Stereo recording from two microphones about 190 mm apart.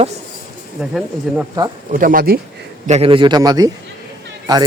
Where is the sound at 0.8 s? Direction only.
Centre (ahead or behind).